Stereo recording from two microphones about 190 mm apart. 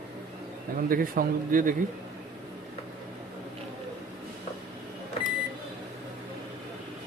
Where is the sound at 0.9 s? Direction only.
50° right (ahead or behind).